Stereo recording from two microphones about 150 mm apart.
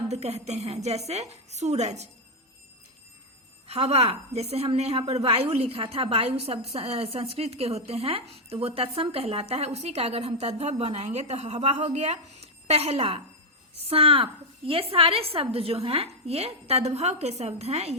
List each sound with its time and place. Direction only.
0.1 s a woman's voice: 45° right (ahead or behind)
3.7 s a woman's voice: 45° right (ahead or behind)